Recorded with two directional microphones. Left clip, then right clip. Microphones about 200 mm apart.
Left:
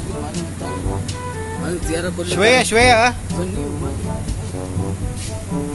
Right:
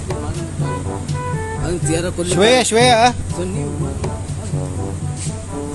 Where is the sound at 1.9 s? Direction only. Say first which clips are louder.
Right 3 dB; 30° right (ahead or behind).